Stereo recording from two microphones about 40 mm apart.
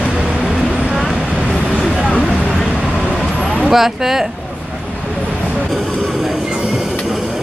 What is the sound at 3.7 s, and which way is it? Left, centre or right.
Speech, centre.